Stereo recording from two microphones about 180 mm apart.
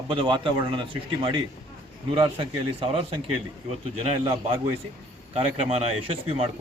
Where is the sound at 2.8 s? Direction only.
30° right (ahead or behind).